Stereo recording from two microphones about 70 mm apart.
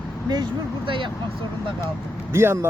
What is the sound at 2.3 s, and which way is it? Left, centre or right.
Speech, right.